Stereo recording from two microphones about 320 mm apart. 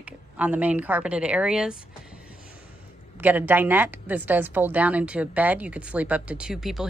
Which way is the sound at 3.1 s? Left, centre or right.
Centre.